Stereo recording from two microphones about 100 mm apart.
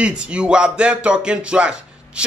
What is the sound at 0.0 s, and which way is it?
Speech, 10° right (ahead or behind).